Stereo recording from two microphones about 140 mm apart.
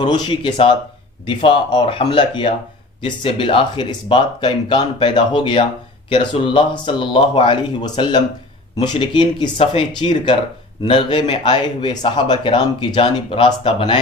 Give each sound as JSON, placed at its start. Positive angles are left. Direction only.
{"t": 0.0, "sound": "speech", "side_deg": 30}